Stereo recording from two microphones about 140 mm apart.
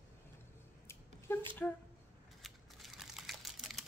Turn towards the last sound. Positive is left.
turn(degrees=0)  # may be behind; listen again after turning